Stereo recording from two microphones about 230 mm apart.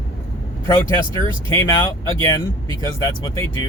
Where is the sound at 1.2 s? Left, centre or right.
Right.